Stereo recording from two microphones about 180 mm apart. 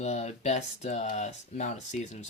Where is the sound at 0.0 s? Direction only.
35° left (ahead or behind).